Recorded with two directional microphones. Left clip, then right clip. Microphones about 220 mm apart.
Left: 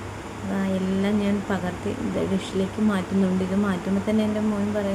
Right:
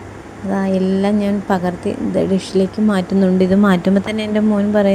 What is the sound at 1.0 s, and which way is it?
Speech, 25° right (ahead or behind).